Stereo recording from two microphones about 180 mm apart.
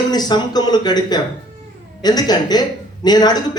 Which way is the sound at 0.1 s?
25° left (ahead or behind).